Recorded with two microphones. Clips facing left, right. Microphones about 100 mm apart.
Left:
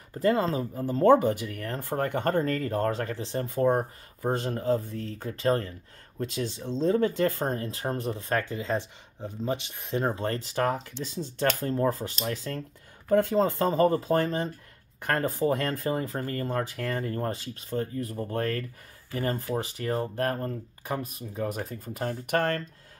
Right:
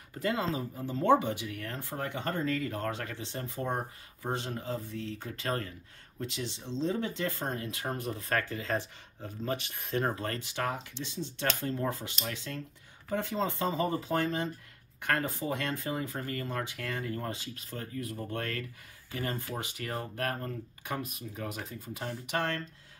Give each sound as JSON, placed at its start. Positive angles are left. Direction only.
{"t": 0.2, "sound": "speech", "side_deg": 40}
{"t": 6.1, "sound": "speech", "side_deg": 45}
{"t": 13.1, "sound": "speech", "side_deg": 50}